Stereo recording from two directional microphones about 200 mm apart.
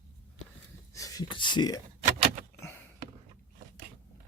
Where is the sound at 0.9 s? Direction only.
15° left (ahead or behind).